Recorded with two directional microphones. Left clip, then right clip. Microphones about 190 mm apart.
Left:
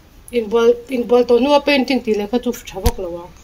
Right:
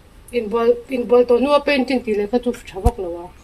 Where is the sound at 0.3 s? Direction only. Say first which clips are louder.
Left 3 dB; 35° left (ahead or behind).